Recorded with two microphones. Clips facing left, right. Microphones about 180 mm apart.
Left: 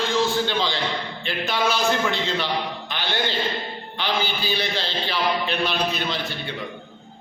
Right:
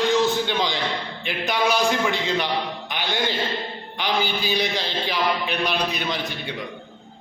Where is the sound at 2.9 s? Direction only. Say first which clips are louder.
Right 1 dB; 15° right (ahead or behind).